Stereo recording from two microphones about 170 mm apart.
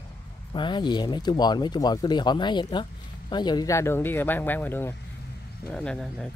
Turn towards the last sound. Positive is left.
turn(degrees=5)  # may be behind; listen again after turning